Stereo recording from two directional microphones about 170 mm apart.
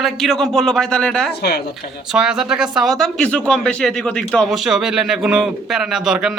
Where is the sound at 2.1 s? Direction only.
5° right (ahead or behind).